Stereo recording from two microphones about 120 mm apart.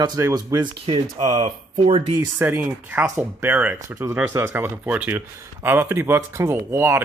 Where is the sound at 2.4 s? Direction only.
20° right (ahead or behind).